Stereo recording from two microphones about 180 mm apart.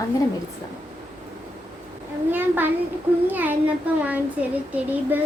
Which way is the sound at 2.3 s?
10° right (ahead or behind).